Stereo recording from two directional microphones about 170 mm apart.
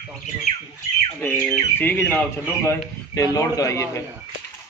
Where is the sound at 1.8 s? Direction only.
10° left (ahead or behind).